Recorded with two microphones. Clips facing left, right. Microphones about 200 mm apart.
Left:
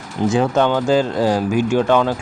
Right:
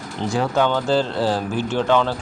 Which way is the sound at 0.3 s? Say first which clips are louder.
Left 4 dB; 20° left (ahead or behind).